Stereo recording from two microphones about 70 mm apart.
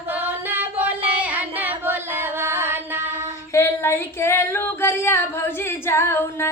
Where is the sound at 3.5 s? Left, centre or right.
Left.